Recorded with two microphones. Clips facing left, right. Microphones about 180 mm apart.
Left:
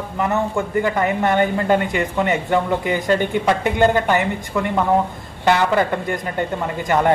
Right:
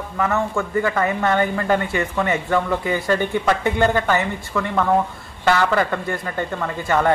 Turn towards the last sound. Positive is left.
turn(degrees=15)  # may be behind; listen again after turning